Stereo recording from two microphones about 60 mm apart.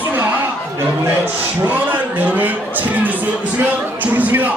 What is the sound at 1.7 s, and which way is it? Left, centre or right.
Speech, right.